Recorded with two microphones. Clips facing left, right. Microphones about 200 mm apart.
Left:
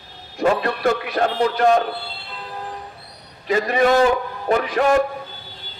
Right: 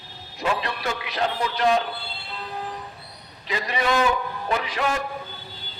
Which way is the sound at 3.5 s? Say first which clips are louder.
Left 8 dB; 45° left (ahead or behind).